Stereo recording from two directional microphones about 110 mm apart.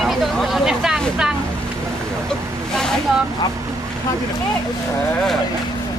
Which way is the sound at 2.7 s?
5° left (ahead or behind).